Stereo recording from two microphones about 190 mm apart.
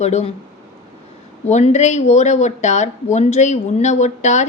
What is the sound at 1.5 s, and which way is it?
Speech, 35° left (ahead or behind).